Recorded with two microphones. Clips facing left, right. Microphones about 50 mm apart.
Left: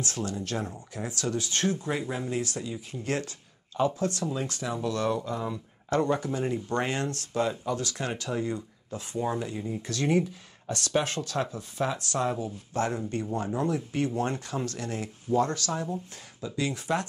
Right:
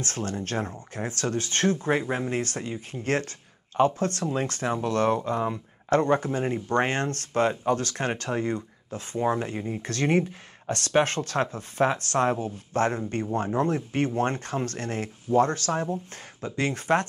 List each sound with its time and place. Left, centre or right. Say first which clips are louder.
0.0 s speech: right 2 dB; right